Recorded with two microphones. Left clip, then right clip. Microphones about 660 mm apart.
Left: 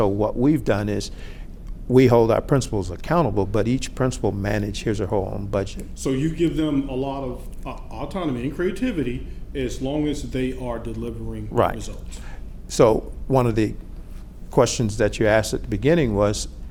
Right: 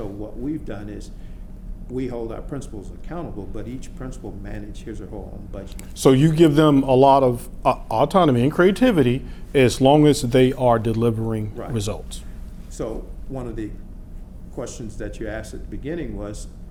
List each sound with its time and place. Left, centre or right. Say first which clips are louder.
0.0 s speech: left 11 dB; left
6.0 s a man's voice: right 8 dB; right
12.7 s speech: left 13 dB; left